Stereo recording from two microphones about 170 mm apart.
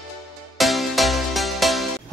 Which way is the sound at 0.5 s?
Centre (ahead or behind).